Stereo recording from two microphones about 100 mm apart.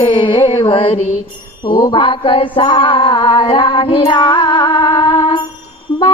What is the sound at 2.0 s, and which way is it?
Music, 60° left (ahead or behind).